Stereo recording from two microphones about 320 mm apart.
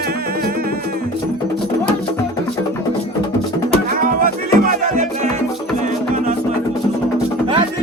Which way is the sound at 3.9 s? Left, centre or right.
Right.